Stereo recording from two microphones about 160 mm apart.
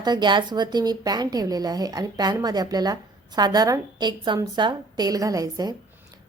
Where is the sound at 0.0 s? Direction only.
25° right (ahead or behind).